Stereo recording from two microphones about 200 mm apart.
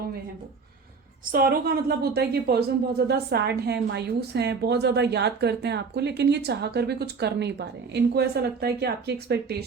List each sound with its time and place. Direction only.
1.3 s a woman's voice: 45° right (ahead or behind)